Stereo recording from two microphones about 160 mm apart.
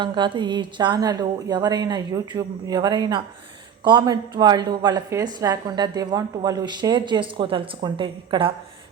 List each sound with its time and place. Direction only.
0.0 s a woman's voice: 30° right (ahead or behind)